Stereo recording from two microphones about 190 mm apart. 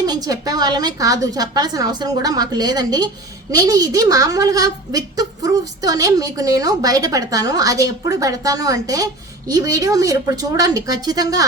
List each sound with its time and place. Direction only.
0.0 s a woman's voice: 20° right (ahead or behind)